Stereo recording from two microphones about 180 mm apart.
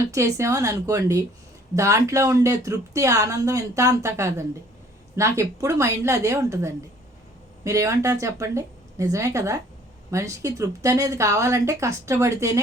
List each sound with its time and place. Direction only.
0.1 s speech: 15° right (ahead or behind)